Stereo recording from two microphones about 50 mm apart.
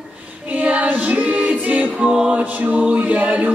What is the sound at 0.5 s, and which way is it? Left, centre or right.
Music, right.